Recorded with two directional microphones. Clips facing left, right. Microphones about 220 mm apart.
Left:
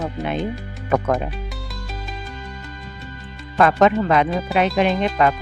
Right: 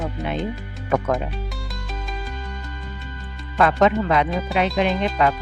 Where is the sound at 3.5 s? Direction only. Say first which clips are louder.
Left 2 dB; 50° left (ahead or behind).